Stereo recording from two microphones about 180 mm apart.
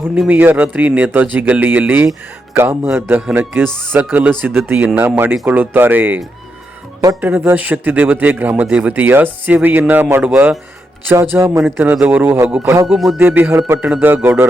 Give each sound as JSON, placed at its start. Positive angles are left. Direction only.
{"t": 0.0, "sound": "a man's voice", "side_deg": -10}
{"t": 3.7, "sound": "music", "side_deg": 5}
{"t": 3.9, "sound": "a man's voice", "side_deg": -10}
{"t": 12.9, "sound": "music", "side_deg": 0}
{"t": 13.1, "sound": "a man's voice", "side_deg": -15}